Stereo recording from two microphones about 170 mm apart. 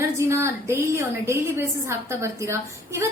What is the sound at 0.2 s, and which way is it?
A woman's voice, 15° right (ahead or behind).